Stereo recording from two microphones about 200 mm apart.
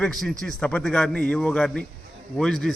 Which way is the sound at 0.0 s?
5° left (ahead or behind).